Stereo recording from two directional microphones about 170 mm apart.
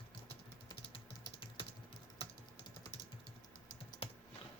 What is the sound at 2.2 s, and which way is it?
Computer keyboard, 30° left (ahead or behind).